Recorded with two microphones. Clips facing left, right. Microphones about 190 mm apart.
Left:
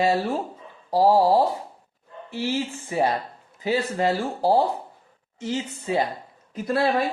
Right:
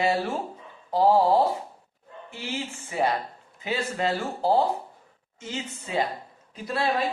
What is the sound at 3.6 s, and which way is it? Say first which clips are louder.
Speech: left 5 dB; 35° left (ahead or behind).